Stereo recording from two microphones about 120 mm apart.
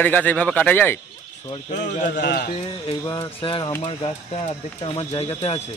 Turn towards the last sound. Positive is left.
turn(degrees=55)  # may be behind; listen again after turning